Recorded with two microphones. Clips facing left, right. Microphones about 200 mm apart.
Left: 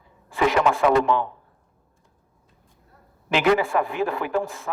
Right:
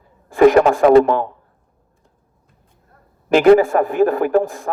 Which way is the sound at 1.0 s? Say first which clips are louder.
Right 4 dB; 45° right (ahead or behind).